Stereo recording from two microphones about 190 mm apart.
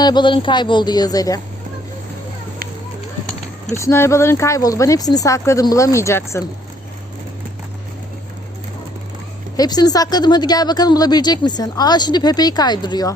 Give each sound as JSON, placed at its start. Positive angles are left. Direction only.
{"t": 0.0, "sound": "speech", "side_deg": 25}
{"t": 3.7, "sound": "speech", "side_deg": 15}
{"t": 9.6, "sound": "speech", "side_deg": 20}